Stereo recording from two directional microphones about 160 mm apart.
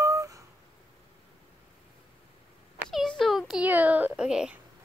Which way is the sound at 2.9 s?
Centre (ahead or behind).